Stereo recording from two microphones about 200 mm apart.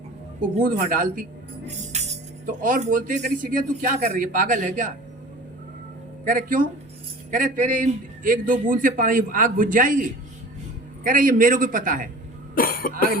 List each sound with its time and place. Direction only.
0.6 s a man's voice: 45° right (ahead or behind)
6.2 s a man's voice: 45° right (ahead or behind)
11.0 s a man's voice: 45° right (ahead or behind)
12.5 s cough: 45° left (ahead or behind)